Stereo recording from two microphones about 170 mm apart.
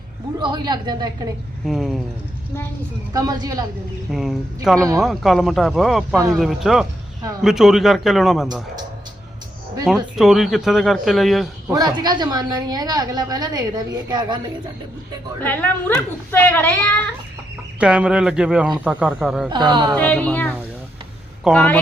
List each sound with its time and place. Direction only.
0.3 s a woman's voice: 25° right (ahead or behind)
1.6 s speech: centre (ahead or behind)
3.1 s a woman's voice: 25° right (ahead or behind)
4.1 s speech: centre (ahead or behind)
9.8 s speech: centre (ahead or behind)
11.7 s a woman's voice: 25° right (ahead or behind)
15.4 s a woman's voice: 10° left (ahead or behind)
17.7 s speech: 5° right (ahead or behind)
19.5 s a woman's voice: 25° right (ahead or behind)
19.9 s a woman's voice: 10° left (ahead or behind)